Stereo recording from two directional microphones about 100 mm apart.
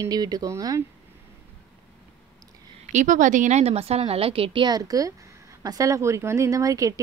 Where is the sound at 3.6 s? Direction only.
90° right; by 4.6 s 70° right (ahead or behind).